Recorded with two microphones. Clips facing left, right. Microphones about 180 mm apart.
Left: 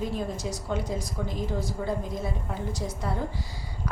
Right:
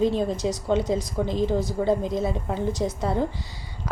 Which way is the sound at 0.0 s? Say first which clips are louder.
Right 8 dB; 25° right (ahead or behind).